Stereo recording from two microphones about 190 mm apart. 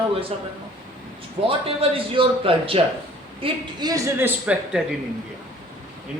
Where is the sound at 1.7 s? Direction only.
30° right (ahead or behind).